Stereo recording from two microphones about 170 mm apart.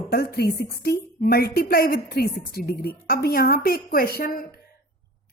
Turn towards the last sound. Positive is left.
turn(degrees=65)  # may be behind; listen again after turning